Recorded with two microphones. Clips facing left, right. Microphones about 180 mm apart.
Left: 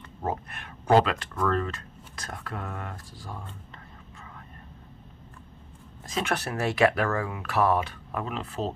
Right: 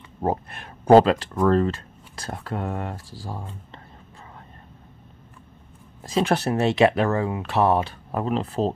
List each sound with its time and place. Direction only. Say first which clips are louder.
0.2 s speech: right 6 dB; 35° right (ahead or behind)
6.0 s speech: right 8 dB; 30° right (ahead or behind)